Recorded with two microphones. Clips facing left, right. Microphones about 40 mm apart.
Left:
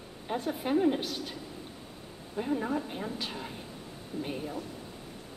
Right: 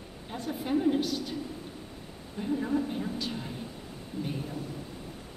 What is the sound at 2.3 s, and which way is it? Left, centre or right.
A woman's voice, centre.